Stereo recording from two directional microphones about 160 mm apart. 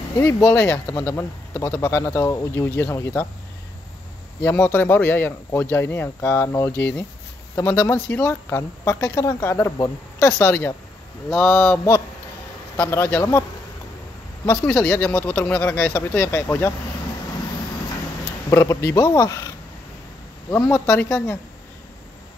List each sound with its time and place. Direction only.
0.2 s speech: 15° left (ahead or behind)
4.4 s speech: 15° left (ahead or behind)
18.5 s speech: 15° left (ahead or behind)
20.5 s speech: 15° left (ahead or behind)